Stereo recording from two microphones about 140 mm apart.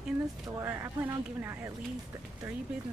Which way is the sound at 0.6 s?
20° right (ahead or behind).